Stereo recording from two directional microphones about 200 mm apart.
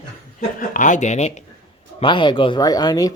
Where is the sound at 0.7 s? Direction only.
40° left (ahead or behind).